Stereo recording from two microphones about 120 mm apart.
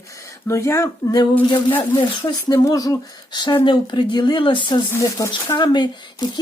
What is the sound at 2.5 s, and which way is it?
Speech, 30° left (ahead or behind).